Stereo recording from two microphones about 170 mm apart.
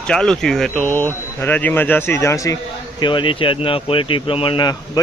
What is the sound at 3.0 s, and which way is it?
Speech, 30° left (ahead or behind).